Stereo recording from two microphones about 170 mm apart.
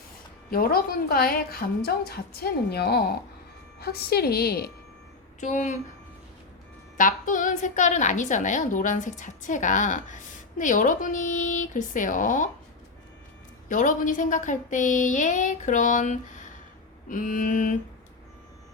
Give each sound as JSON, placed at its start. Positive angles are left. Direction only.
{"t": 0.5, "sound": "a woman's voice", "side_deg": 60}
{"t": 5.4, "sound": "a woman's voice", "side_deg": 45}
{"t": 6.9, "sound": "a woman's voice", "side_deg": 50}
{"t": 13.7, "sound": "a woman's voice", "side_deg": 50}